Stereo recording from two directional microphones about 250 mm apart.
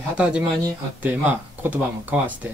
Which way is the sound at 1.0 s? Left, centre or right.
Centre.